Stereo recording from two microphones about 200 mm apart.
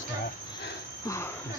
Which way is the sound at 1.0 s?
15° left (ahead or behind).